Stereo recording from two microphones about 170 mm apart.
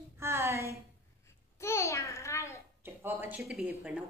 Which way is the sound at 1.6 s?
15° left (ahead or behind).